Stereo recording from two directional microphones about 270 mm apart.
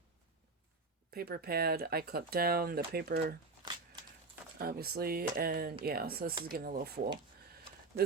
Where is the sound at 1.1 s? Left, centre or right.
Right.